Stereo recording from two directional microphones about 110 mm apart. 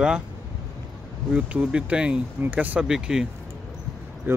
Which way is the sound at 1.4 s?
10° right (ahead or behind).